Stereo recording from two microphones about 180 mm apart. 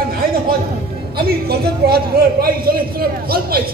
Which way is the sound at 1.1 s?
60° right (ahead or behind).